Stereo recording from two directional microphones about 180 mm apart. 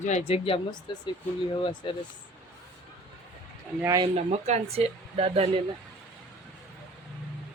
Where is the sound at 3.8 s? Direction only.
15° right (ahead or behind).